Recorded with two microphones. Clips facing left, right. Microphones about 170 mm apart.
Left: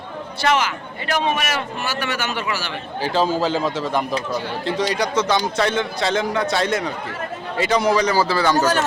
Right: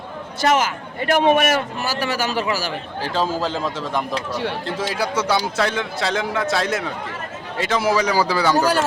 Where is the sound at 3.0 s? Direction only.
Centre (ahead or behind).